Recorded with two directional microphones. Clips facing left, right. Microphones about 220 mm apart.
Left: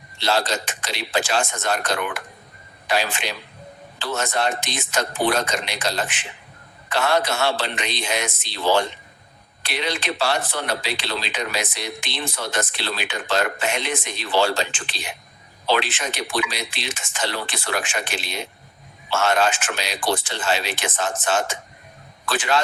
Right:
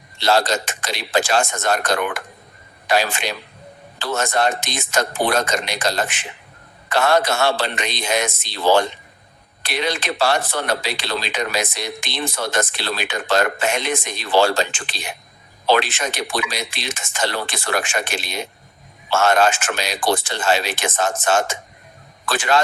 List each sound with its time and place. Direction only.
0.2 s speech: 45° right (ahead or behind)